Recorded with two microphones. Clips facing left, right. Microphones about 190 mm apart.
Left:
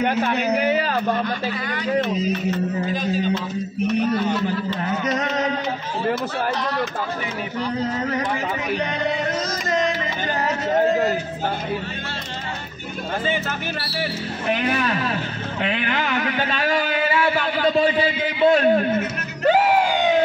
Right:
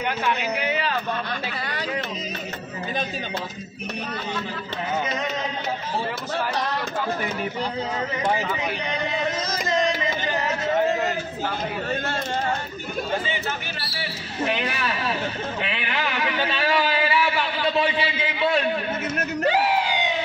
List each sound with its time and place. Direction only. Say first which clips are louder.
0.0 s a man's voice: left 5 dB; 45° left (ahead or behind)
15.6 s a man's voice: left 7 dB; 45° left (ahead or behind)
19.4 s a sound: left 6 dB; 45° left (ahead or behind)